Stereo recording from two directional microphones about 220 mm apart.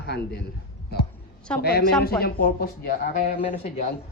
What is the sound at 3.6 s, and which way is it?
Speech, 30° left (ahead or behind).